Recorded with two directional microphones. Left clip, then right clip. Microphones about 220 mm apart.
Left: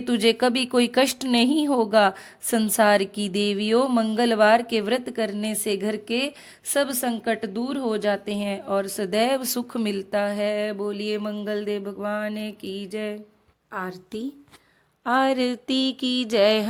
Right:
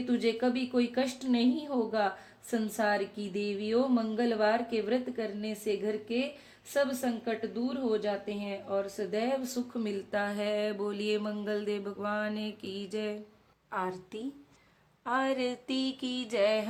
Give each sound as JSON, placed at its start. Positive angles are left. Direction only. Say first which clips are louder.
{"t": 0.0, "sound": "a woman's voice", "louder": "left 9 dB", "side_deg": 50}
{"t": 15.0, "sound": "mantra", "louder": "left 9 dB", "side_deg": 30}